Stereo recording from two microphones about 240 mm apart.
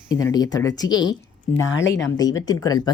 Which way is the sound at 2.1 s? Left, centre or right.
Centre.